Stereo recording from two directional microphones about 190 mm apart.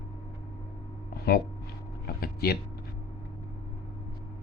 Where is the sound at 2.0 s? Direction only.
55° left (ahead or behind).